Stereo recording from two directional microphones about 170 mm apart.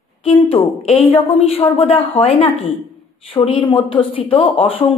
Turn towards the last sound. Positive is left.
turn(degrees=35)  # may be behind; listen again after turning